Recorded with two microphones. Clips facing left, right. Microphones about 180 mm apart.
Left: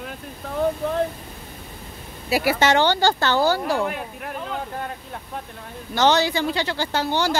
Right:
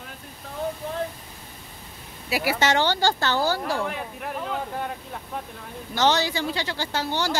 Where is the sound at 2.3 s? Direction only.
40° left (ahead or behind).